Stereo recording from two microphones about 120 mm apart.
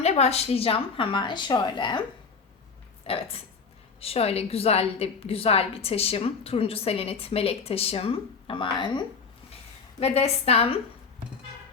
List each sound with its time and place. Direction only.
0.0 s a woman's voice: 60° left (ahead or behind); by 2.0 s 40° left (ahead or behind)
3.1 s a woman's voice: 55° left (ahead or behind)
10.0 s a woman's voice: 60° left (ahead or behind)